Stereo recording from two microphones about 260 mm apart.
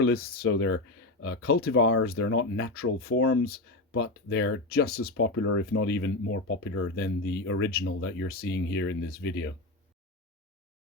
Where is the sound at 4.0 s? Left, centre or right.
Left.